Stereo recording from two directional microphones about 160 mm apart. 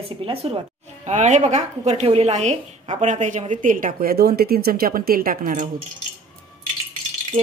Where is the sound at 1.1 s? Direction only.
45° right (ahead or behind); by 5.6 s 60° right (ahead or behind).